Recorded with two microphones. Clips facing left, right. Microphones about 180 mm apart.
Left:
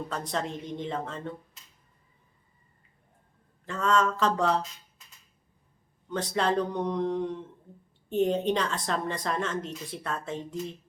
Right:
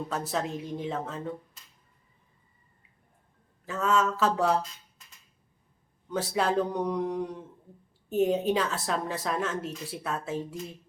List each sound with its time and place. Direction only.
0.1 s speech: 5° right (ahead or behind)
3.7 s a woman's voice: 5° right (ahead or behind)
6.1 s a woman's voice: 5° right (ahead or behind)